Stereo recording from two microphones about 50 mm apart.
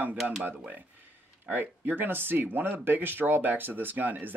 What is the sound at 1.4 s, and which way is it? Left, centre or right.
Speech, right.